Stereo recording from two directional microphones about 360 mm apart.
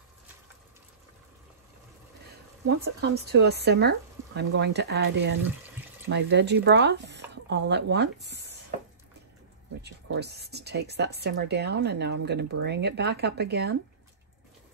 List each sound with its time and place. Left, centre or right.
2.6 s speech: right
5.4 s water: centre
6.0 s speech: right
9.8 s speech: right